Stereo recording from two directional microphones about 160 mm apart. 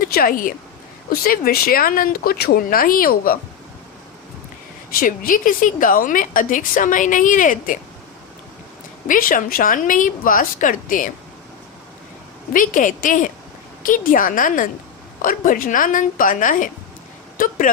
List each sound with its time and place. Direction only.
0.0 s a woman's voice: 65° left (ahead or behind)
4.9 s a woman's voice: 60° left (ahead or behind)
9.0 s a woman's voice: 60° left (ahead or behind)
12.5 s a woman's voice: 55° left (ahead or behind)